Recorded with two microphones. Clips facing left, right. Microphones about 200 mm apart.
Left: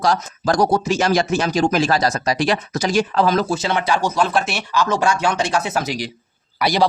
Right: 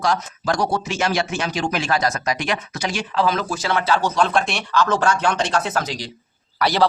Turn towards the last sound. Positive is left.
turn(degrees=15)  # may be behind; listen again after turning